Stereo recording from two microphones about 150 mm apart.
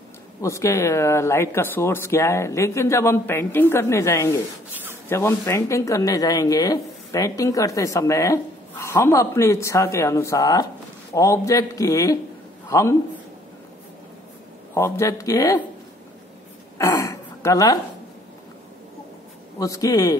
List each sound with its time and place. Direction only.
0.4 s a man's voice: 20° left (ahead or behind)
14.7 s speech: 20° left (ahead or behind)
16.7 s throat clearing: 20° left (ahead or behind)
19.6 s speech: 25° left (ahead or behind)